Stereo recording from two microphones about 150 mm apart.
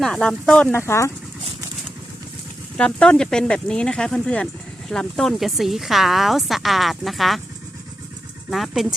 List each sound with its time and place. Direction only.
0.0 s speech: 5° left (ahead or behind)
2.7 s speech: 5° left (ahead or behind)
8.4 s speech: centre (ahead or behind)